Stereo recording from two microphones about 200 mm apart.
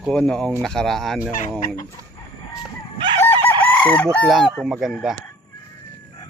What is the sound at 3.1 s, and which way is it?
Chicken, 10° left (ahead or behind).